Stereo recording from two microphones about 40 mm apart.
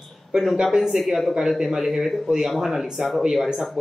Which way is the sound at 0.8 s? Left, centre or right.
Centre.